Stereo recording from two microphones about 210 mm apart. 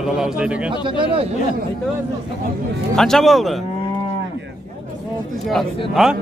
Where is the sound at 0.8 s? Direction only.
25° right (ahead or behind).